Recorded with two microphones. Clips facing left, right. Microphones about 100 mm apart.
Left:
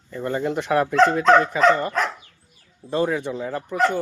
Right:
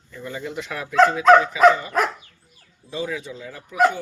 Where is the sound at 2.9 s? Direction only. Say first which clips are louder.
Left 6 dB; 50° left (ahead or behind).